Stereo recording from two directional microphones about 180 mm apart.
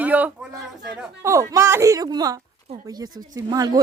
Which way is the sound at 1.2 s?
15° right (ahead or behind).